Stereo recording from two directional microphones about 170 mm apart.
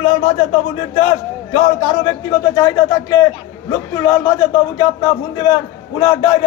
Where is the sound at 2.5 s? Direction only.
20° left (ahead or behind).